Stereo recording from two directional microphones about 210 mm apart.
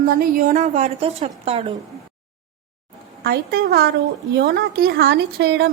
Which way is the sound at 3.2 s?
45° right (ahead or behind).